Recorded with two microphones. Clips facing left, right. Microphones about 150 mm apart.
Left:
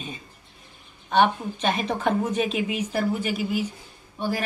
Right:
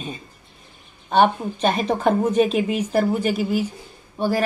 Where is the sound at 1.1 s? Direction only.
35° right (ahead or behind).